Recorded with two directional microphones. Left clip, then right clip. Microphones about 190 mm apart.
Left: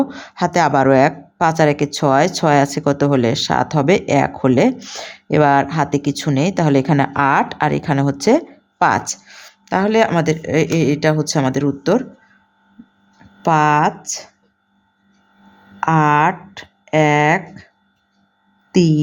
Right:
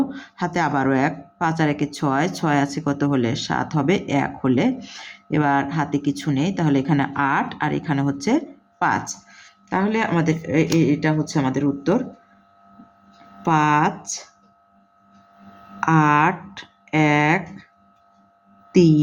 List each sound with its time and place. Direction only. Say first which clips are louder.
0.1 s a woman's voice: left 7 dB; 45° left (ahead or behind)
13.4 s speech: left 4 dB; 40° left (ahead or behind)
15.8 s speech: left 3 dB; 35° left (ahead or behind)
18.7 s a sound: even; 35° left (ahead or behind)